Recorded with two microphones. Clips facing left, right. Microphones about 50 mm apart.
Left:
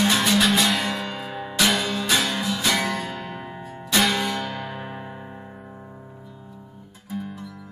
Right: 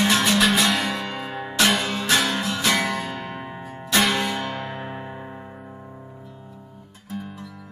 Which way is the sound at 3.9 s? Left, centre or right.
Centre.